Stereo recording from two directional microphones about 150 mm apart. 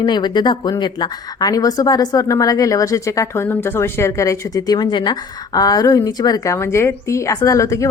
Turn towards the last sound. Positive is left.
turn(degrees=20)  # may be behind; listen again after turning